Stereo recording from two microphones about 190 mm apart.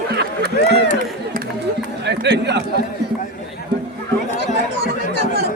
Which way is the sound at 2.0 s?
65° right (ahead or behind).